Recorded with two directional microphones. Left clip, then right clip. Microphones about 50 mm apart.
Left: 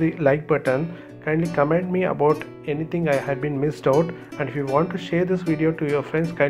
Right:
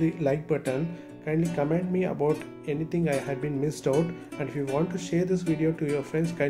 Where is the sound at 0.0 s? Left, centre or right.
Left.